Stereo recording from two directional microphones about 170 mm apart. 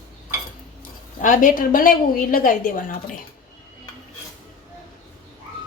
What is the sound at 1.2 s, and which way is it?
A woman's voice, 50° left (ahead or behind).